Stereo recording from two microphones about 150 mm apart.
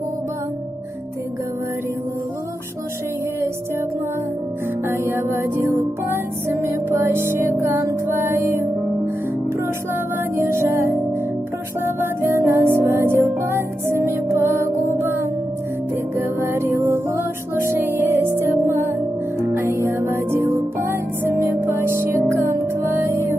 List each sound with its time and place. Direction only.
4.8 s music: 15° right (ahead or behind)
6.5 s music: 20° right (ahead or behind)
10.3 s music: 20° right (ahead or behind)
12.0 s music: 15° right (ahead or behind)
16.2 s music: 15° right (ahead or behind)